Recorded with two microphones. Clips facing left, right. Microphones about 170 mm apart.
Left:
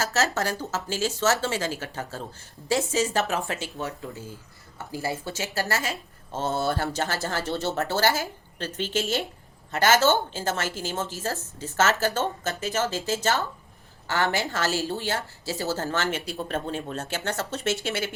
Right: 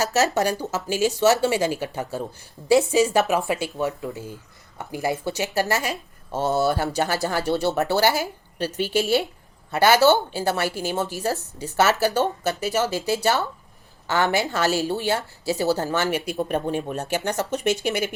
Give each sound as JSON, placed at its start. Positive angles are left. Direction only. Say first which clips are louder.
{"t": 0.0, "sound": "speech", "louder": "right 5 dB", "side_deg": -15}